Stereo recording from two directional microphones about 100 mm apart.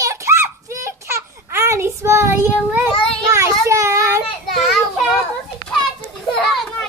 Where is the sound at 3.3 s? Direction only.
30° right (ahead or behind).